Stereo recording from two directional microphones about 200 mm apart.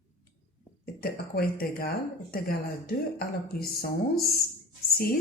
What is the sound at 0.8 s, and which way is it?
A woman's voice, 50° left (ahead or behind).